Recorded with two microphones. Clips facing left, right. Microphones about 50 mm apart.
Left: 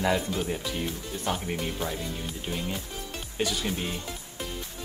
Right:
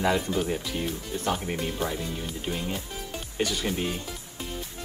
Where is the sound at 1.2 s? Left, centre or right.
Centre.